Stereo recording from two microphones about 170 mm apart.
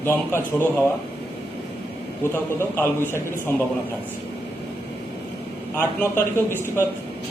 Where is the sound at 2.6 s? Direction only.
15° left (ahead or behind).